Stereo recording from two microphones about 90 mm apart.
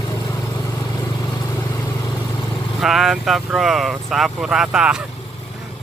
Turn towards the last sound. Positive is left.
turn(degrees=-10)  # may be behind; listen again after turning